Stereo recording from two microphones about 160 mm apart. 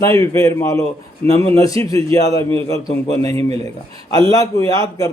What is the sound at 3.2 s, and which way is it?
A man's voice, 20° left (ahead or behind).